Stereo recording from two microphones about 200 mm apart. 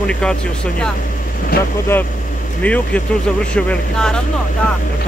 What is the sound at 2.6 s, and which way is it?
Speech, 5° left (ahead or behind).